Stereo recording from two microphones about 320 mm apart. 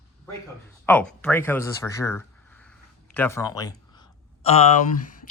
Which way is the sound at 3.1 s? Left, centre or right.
Centre.